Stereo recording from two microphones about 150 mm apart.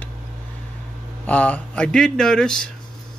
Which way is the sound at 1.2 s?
10° left (ahead or behind).